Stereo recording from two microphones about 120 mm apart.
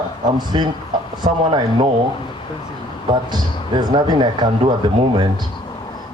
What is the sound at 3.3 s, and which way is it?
Speech, 35° right (ahead or behind).